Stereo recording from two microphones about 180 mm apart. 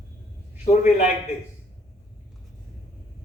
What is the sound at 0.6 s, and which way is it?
Speech, 40° left (ahead or behind).